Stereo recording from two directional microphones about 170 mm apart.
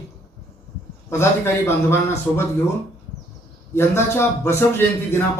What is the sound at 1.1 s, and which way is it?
Speech, 15° left (ahead or behind).